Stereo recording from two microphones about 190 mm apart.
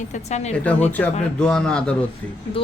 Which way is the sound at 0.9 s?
10° left (ahead or behind).